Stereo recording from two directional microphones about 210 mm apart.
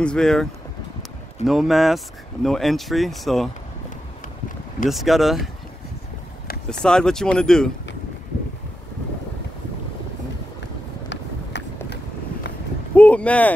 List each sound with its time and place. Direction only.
0.0 s speech: 5° left (ahead or behind)
4.8 s speech: centre (ahead or behind)
6.7 s speech: 5° left (ahead or behind)
11.1 s run: 55° left (ahead or behind)
12.9 s a sound: 5° left (ahead or behind)